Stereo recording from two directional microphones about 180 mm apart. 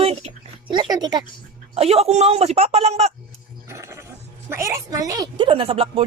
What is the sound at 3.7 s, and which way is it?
Goat, 15° right (ahead or behind).